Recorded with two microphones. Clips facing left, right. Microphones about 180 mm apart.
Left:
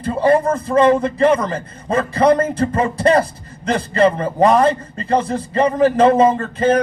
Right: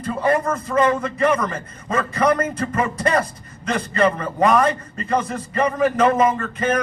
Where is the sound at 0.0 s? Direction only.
30° left (ahead or behind).